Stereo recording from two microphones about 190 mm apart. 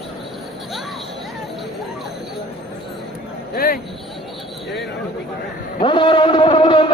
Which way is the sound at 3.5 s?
50° left (ahead or behind).